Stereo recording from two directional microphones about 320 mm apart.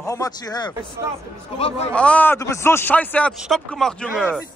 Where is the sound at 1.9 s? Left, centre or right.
Centre.